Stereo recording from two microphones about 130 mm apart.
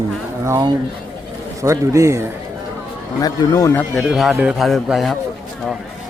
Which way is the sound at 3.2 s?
25° left (ahead or behind).